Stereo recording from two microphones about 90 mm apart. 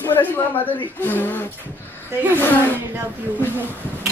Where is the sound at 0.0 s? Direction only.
20° left (ahead or behind).